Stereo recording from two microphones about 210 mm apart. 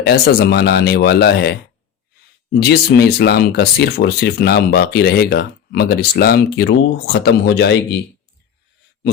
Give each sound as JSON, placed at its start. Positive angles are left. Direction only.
{"t": 0.0, "sound": "speech", "side_deg": 50}
{"t": 2.6, "sound": "speech", "side_deg": 50}